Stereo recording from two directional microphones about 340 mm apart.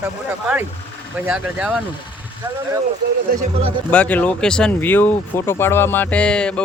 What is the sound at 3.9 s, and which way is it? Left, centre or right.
Speech, centre.